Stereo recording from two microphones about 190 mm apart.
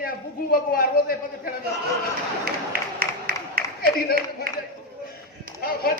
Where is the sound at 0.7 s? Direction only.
50° left (ahead or behind).